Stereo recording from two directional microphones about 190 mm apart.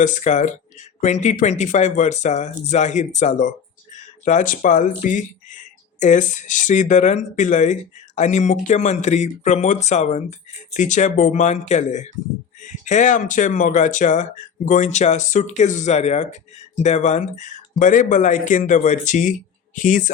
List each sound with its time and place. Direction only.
0.0 s speech: 40° left (ahead or behind)